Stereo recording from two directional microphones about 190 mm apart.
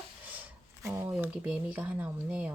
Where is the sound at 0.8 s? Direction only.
15° right (ahead or behind).